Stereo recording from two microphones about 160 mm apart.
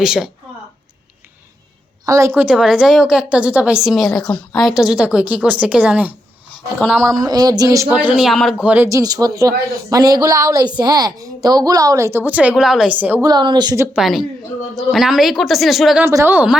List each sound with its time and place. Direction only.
0.0 s a woman's voice: 5° right (ahead or behind)
2.0 s a woman's voice: 20° right (ahead or behind)
6.7 s a woman's voice: centre (ahead or behind)
7.3 s a woman's voice: 25° right (ahead or behind)
7.9 s a woman's voice: 5° right (ahead or behind)
8.9 s a woman's voice: 20° right (ahead or behind)
13.2 s a woman's voice: 25° right (ahead or behind)
13.9 s a woman's voice: centre (ahead or behind)
16.0 s a woman's voice: 15° right (ahead or behind)